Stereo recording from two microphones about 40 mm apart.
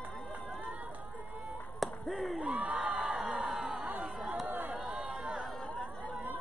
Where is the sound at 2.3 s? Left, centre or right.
Right.